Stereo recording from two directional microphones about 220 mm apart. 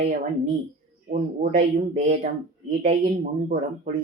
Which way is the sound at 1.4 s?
35° right (ahead or behind).